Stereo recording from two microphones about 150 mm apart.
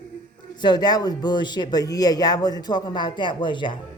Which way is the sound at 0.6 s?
30° left (ahead or behind).